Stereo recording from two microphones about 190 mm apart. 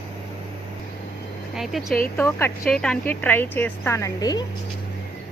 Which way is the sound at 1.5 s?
Centre (ahead or behind).